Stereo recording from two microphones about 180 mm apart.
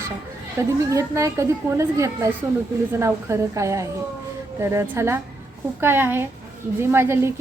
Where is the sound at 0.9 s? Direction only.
15° right (ahead or behind).